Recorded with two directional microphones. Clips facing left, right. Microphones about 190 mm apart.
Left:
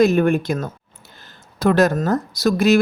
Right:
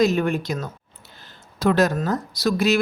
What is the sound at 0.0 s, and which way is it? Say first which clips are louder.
Speech: left 5 dB; 55° left (ahead or behind).